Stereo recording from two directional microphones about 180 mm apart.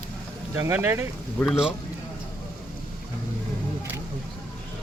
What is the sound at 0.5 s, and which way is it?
Speech, 15° right (ahead or behind).